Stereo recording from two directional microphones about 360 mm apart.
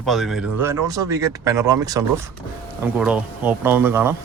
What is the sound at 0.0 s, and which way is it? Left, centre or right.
Speech, centre.